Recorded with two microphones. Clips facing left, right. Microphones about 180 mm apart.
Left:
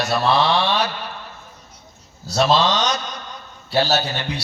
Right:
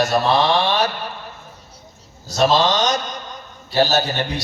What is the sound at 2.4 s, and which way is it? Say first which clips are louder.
A man's voice: right 1 dB; 45° right (ahead or behind).